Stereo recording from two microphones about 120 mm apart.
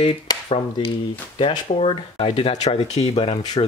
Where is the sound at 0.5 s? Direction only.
50° left (ahead or behind).